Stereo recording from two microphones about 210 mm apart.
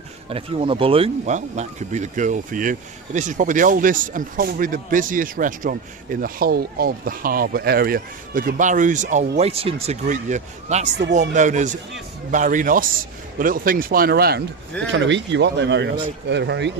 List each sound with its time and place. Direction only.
0.3 s speech: 25° right (ahead or behind); by 14.4 s 50° right (ahead or behind)
14.8 s speech: 60° right (ahead or behind)